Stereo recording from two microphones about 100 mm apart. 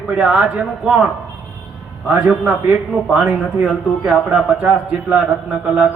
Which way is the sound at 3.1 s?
10° right (ahead or behind).